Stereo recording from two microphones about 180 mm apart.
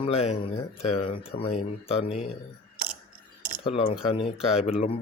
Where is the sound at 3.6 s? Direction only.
30° left (ahead or behind).